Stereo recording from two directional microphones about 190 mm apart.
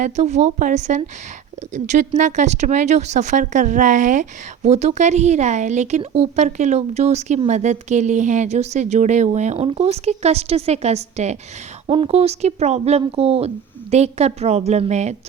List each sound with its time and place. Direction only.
0.0 s speech: 35° right (ahead or behind)